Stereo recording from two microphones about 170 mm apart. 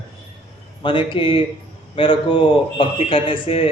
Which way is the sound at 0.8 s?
30° left (ahead or behind).